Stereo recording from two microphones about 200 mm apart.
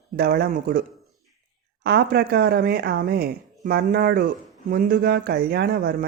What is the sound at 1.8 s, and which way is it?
A woman's voice, 50° right (ahead or behind).